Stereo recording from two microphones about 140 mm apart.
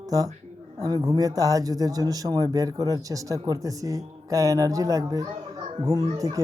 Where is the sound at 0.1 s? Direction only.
25° right (ahead or behind).